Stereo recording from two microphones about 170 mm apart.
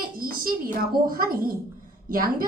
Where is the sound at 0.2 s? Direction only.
60° right (ahead or behind).